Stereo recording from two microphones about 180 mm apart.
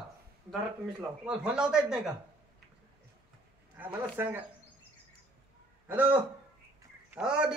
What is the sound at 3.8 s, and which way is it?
Speech, 10° right (ahead or behind).